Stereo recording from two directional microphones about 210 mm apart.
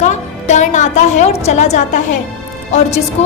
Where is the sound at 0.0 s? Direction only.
35° left (ahead or behind).